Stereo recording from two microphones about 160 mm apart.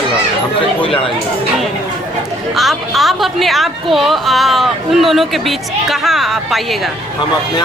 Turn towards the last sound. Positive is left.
turn(degrees=0)  # may be behind; listen again after turning